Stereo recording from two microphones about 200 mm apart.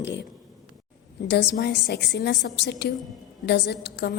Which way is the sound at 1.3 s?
55° left (ahead or behind).